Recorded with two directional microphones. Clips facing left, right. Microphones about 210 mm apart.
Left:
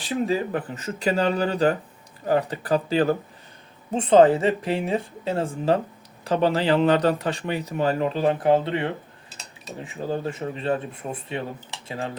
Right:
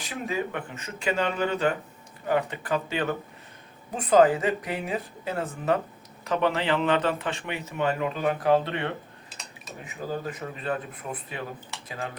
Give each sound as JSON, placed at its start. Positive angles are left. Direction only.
{"t": 0.0, "sound": "speech", "side_deg": 35}